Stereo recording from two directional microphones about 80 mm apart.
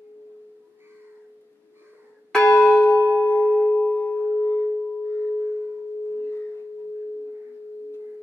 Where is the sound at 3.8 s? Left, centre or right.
Centre.